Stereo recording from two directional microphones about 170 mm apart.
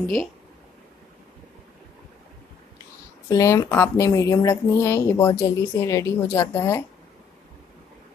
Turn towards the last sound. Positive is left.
turn(degrees=15)  # may be behind; listen again after turning